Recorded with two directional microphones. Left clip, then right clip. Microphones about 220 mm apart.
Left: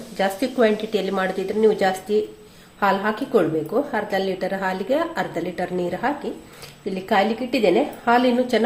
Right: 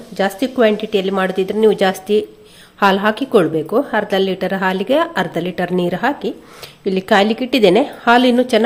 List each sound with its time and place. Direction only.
0.2 s a woman's voice: 35° right (ahead or behind)